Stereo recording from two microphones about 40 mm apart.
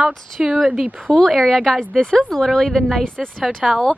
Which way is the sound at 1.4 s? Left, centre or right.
Centre.